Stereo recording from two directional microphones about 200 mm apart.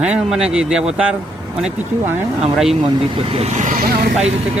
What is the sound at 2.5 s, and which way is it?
Speech, centre (ahead or behind).